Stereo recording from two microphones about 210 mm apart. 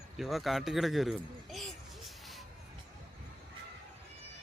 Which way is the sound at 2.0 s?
Centre (ahead or behind).